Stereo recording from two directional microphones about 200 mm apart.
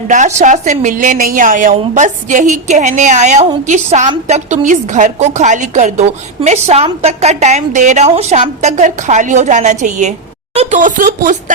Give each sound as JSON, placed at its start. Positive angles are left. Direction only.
{"t": 0.3, "sound": "a woman's voice", "side_deg": -35}